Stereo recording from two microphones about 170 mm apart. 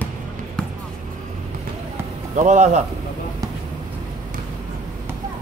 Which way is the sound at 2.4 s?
45° right (ahead or behind).